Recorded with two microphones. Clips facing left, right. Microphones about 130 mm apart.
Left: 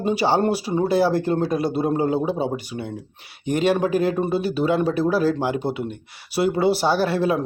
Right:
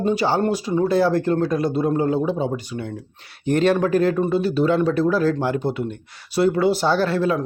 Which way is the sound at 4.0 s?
20° left (ahead or behind).